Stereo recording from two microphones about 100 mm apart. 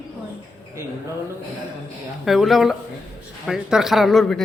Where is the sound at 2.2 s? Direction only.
Centre (ahead or behind).